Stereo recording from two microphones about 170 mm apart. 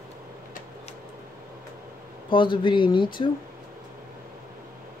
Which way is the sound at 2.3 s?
30° left (ahead or behind).